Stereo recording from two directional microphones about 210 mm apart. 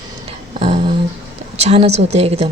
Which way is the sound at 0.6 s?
30° right (ahead or behind).